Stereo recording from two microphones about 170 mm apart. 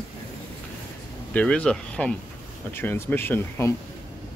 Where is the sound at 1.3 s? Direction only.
5° left (ahead or behind).